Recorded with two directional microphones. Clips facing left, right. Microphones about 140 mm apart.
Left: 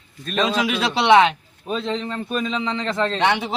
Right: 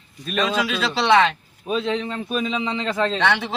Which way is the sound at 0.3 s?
30° left (ahead or behind).